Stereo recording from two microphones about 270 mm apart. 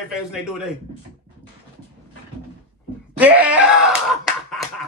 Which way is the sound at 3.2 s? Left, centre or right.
Centre.